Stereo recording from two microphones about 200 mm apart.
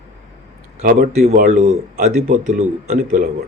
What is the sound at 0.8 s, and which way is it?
Speech, 40° right (ahead or behind).